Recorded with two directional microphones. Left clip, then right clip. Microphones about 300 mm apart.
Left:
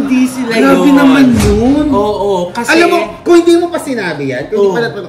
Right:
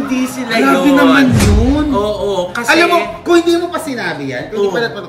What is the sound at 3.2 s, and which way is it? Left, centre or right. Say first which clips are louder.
Speech: left 7 dB; centre.